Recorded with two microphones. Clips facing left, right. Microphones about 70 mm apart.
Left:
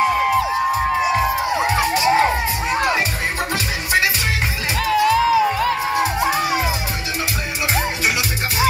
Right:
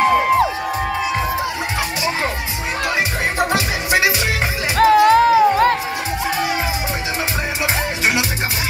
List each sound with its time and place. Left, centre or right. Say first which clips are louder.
3.3 s music: right 4 dB; right
4.7 s music: right 6 dB; right